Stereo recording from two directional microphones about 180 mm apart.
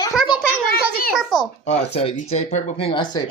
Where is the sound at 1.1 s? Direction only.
Centre (ahead or behind).